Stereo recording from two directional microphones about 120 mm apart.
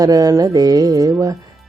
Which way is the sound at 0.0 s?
30° right (ahead or behind).